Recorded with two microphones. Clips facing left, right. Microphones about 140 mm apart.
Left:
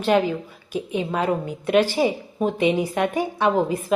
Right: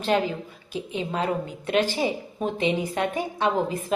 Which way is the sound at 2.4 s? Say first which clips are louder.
Left 5 dB; 15° left (ahead or behind).